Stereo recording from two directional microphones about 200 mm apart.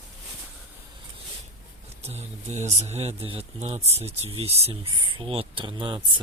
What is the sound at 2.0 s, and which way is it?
Speech, 35° right (ahead or behind).